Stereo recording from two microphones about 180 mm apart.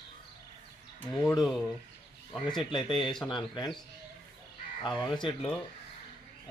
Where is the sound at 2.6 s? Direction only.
25° left (ahead or behind).